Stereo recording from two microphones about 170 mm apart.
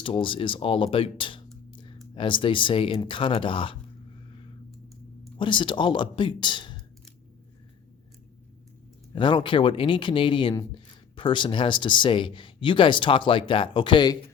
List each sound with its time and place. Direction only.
0.0 s speech: 30° left (ahead or behind)
1.7 s a sound: 30° left (ahead or behind)
2.1 s speech: 30° left (ahead or behind)
5.4 s speech: 30° left (ahead or behind)
9.1 s speech: 30° left (ahead or behind)